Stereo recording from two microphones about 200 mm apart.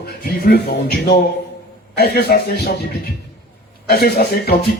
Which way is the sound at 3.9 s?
50° left (ahead or behind).